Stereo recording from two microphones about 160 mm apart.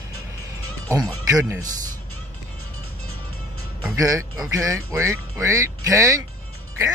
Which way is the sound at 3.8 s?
20° right (ahead or behind).